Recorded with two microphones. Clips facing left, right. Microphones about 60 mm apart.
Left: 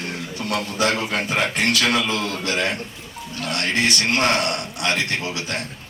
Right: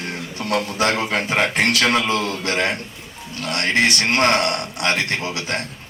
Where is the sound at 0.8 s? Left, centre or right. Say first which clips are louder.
Left 1 dB; right.